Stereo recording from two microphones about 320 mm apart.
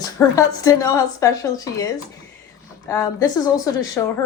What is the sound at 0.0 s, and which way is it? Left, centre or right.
Speech, centre.